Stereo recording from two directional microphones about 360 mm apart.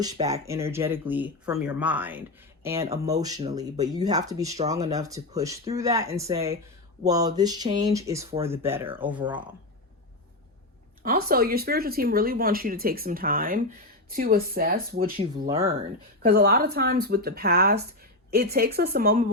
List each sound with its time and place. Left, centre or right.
0.0 s speech: centre
11.0 s speech: right
15.4 s speech: centre
16.2 s speech: right